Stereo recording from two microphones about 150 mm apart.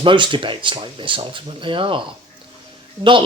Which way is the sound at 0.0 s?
35° right (ahead or behind).